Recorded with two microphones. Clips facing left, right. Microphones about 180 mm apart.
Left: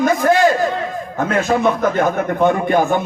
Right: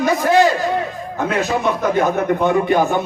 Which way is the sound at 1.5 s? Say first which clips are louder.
Left 4 dB; 60° left (ahead or behind).